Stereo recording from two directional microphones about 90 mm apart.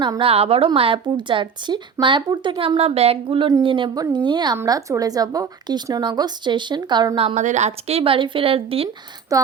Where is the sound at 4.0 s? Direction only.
55° right (ahead or behind).